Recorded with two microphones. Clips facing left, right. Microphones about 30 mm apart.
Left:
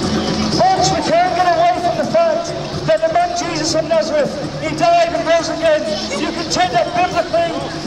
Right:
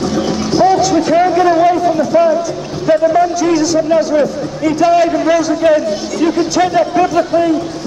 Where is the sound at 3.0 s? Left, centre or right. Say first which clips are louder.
Right 4 dB; centre.